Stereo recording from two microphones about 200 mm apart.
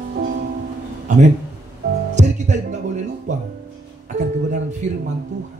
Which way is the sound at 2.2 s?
35° right (ahead or behind).